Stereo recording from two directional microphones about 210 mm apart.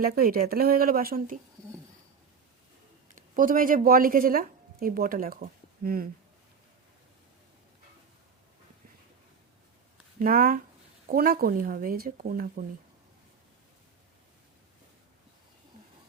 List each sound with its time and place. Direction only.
0.0 s speech: 45° right (ahead or behind)
3.2 s speech: 40° right (ahead or behind)
10.2 s speech: 45° right (ahead or behind)